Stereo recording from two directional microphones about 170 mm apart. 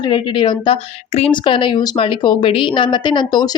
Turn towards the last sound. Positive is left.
turn(degrees=25)  # may be behind; listen again after turning